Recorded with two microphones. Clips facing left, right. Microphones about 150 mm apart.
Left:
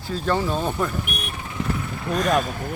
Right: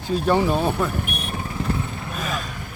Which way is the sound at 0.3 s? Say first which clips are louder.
Right 3 dB; 15° right (ahead or behind).